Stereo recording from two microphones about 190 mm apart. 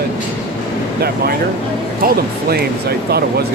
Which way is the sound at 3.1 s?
55° right (ahead or behind).